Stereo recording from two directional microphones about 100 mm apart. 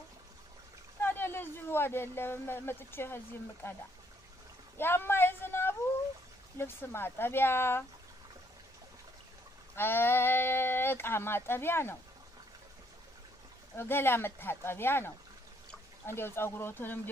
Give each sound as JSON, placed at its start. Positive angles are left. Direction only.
{"t": 1.0, "sound": "speech", "side_deg": 20}
{"t": 4.7, "sound": "a sound", "side_deg": 20}
{"t": 6.6, "sound": "speech", "side_deg": 25}
{"t": 9.8, "sound": "speech", "side_deg": 20}
{"t": 13.7, "sound": "speech", "side_deg": 20}